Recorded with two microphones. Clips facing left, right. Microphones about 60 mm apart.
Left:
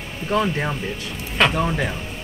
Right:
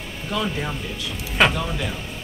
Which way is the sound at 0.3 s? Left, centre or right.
Left.